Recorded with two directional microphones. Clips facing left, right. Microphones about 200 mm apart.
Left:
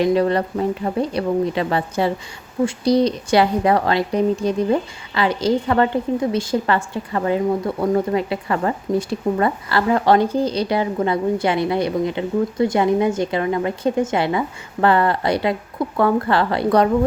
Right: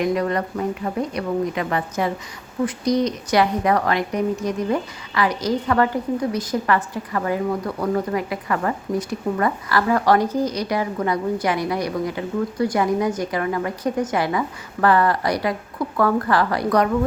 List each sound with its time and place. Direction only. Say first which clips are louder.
0.0 s a woman's voice: left 4 dB; 30° left (ahead or behind)